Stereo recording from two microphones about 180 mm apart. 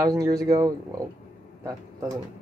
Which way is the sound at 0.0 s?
20° right (ahead or behind).